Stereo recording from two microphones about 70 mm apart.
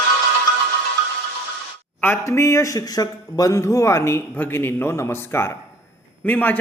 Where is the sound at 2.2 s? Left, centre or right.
Left.